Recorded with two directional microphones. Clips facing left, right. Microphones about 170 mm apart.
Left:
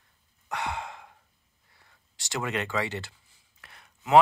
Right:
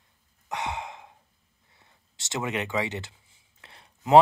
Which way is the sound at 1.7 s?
20° right (ahead or behind).